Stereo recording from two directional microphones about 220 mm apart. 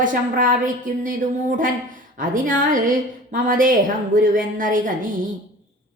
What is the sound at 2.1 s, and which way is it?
A woman's voice, 35° right (ahead or behind).